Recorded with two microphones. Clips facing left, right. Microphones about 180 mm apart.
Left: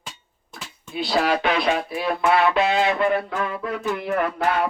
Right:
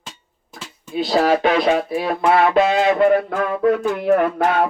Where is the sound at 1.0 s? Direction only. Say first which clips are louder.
Right 5 dB; 45° right (ahead or behind).